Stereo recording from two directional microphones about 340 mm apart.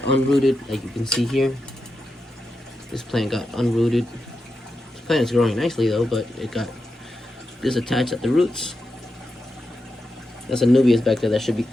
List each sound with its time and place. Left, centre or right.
0.3 s speech: centre
2.9 s speech: centre
5.0 s speech: centre
10.5 s speech: centre